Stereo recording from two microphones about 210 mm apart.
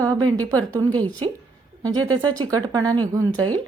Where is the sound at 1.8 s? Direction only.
20° right (ahead or behind).